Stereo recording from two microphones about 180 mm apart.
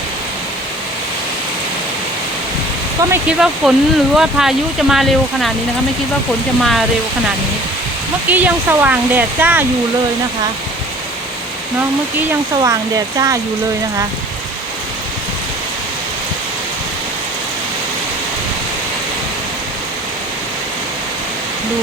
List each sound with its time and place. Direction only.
3.1 s speech: 5° right (ahead or behind)
6.6 s speech: centre (ahead or behind)
8.3 s speech: 10° right (ahead or behind)
13.1 s speech: 20° right (ahead or behind)